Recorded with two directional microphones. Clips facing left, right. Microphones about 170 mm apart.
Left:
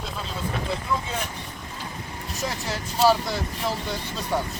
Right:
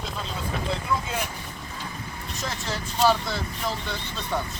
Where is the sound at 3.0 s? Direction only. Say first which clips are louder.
Left 2 dB; 10° left (ahead or behind).